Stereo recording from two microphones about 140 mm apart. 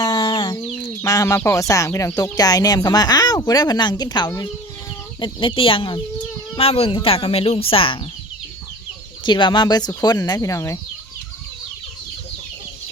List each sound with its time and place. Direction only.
0.0 s a sound: 30° left (ahead or behind)
1.0 s a woman's voice: 25° left (ahead or behind); by 8.0 s 40° left (ahead or behind)
9.2 s speech: 35° left (ahead or behind)